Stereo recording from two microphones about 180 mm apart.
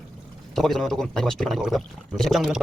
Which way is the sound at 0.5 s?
Centre (ahead or behind).